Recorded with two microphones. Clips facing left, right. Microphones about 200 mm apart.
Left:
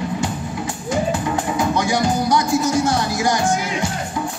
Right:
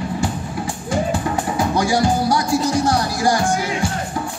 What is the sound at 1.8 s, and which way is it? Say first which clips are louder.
Music: right 1 dB; 20° left (ahead or behind).